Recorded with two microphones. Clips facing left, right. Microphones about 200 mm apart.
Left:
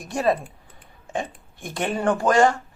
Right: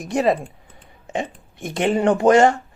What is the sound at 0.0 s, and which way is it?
Speech, 20° right (ahead or behind).